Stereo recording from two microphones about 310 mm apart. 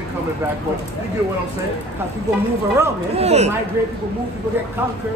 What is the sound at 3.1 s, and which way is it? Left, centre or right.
Speech, centre.